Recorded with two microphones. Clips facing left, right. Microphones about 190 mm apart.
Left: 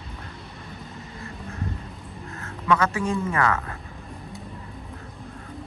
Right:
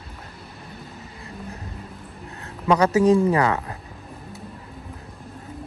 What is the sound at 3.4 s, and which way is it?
Speech, 20° right (ahead or behind).